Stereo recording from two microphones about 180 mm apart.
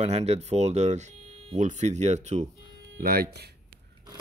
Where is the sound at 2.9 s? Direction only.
55° right (ahead or behind).